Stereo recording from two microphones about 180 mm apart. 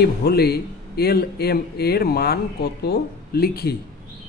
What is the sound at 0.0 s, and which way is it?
A man's voice, 60° left (ahead or behind).